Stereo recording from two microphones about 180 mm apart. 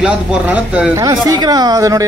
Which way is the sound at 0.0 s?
5° right (ahead or behind).